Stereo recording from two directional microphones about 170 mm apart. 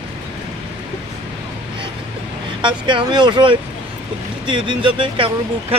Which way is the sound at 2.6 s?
30° right (ahead or behind).